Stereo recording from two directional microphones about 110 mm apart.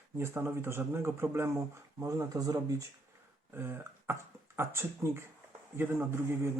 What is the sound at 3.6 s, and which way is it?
Speech, 20° right (ahead or behind).